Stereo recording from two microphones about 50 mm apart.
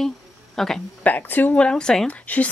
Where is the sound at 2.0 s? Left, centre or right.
Left.